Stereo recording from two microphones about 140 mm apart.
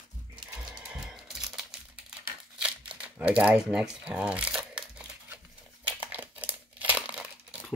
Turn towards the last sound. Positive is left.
turn(degrees=-5)  # may be behind; listen again after turning